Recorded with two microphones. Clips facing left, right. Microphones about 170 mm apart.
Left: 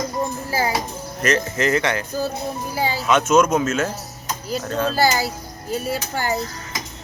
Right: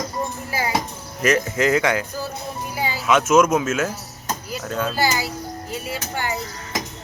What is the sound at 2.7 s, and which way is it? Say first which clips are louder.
Speech: left 3 dB; 35° left (ahead or behind).